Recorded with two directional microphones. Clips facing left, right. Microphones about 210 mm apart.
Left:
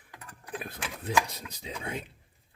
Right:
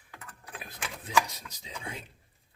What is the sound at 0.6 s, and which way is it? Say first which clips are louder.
Speech: left 3 dB; 55° left (ahead or behind).